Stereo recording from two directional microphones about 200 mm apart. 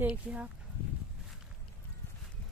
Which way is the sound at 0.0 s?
5° right (ahead or behind).